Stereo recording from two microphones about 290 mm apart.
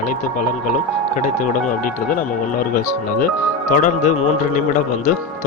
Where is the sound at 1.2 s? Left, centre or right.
Left.